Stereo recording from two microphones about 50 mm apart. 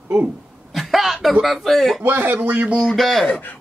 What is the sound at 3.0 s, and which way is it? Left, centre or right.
Speech, centre.